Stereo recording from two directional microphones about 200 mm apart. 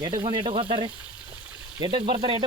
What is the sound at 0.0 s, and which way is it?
Speech, 25° right (ahead or behind).